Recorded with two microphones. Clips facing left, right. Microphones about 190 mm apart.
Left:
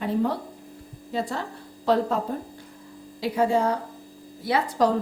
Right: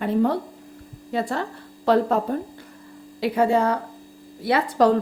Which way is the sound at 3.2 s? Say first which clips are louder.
Right 3 dB; 65° right (ahead or behind).